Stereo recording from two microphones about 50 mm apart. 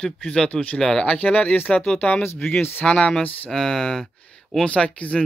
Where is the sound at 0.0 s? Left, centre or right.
Centre.